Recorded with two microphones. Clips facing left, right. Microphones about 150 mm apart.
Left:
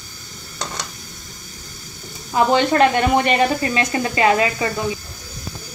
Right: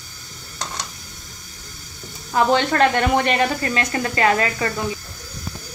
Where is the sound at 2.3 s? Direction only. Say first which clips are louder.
Left 2 dB; 10° left (ahead or behind).